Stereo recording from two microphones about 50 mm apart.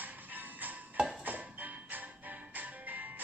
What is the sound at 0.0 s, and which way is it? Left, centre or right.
Music, right.